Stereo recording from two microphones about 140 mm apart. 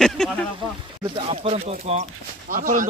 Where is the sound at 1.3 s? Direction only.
45° right (ahead or behind).